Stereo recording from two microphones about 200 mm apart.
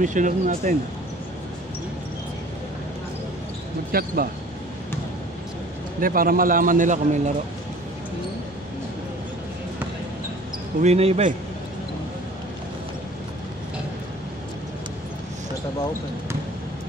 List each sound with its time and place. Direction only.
0.0 s speech: 40° right (ahead or behind)
3.9 s a man's voice: 50° right (ahead or behind)
5.9 s a man's voice: 45° right (ahead or behind)
10.8 s speech: 30° right (ahead or behind)